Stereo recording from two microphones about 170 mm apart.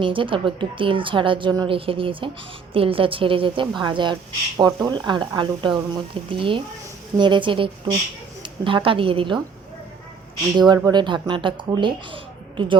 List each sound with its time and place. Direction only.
0.0 s a woman's voice: 30° right (ahead or behind)
10.6 s speech: 25° right (ahead or behind)